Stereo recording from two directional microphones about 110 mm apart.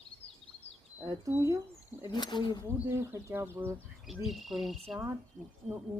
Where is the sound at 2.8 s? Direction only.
25° right (ahead or behind).